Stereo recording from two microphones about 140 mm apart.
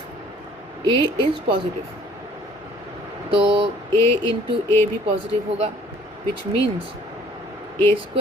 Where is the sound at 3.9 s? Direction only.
20° left (ahead or behind).